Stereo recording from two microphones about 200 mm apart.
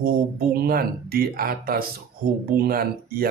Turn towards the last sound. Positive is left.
turn(degrees=-50)  # may be behind; listen again after turning